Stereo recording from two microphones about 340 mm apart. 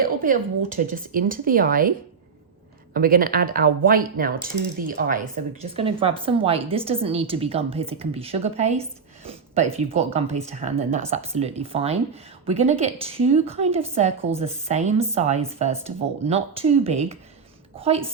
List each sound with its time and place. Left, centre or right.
0.0 s speech: right
2.9 s a woman's voice: right